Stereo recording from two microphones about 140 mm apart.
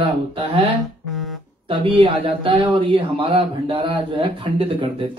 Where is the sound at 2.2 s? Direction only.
35° right (ahead or behind).